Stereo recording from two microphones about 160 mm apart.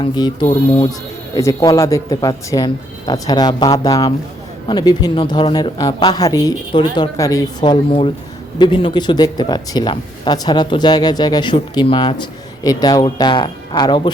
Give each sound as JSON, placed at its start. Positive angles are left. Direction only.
{"t": 0.0, "sound": "speech", "side_deg": 30}